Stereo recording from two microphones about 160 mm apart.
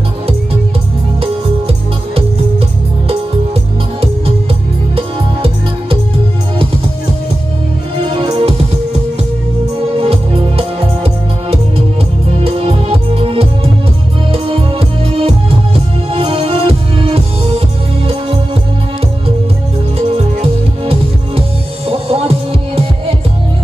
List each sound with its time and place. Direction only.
4.9 s music: 35° right (ahead or behind)
8.1 s music: 35° right (ahead or behind)
9.9 s music: 35° right (ahead or behind)
12.3 s music: 40° right (ahead or behind)
20.4 s music: 35° right (ahead or behind)